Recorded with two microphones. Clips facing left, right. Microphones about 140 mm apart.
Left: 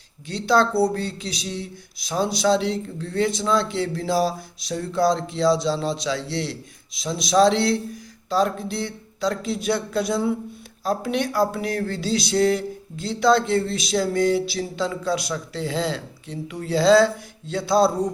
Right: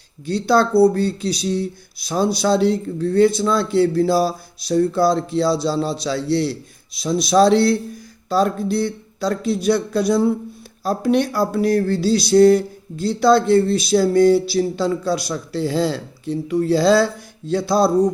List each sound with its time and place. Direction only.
0.3 s speech: 35° right (ahead or behind)